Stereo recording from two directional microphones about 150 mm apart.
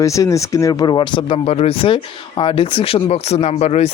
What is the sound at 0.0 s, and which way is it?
Speech, 20° left (ahead or behind).